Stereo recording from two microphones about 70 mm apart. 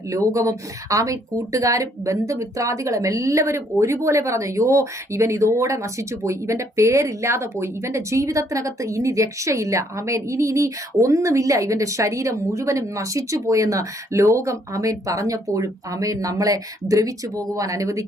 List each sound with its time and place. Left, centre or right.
0.1 s speech: right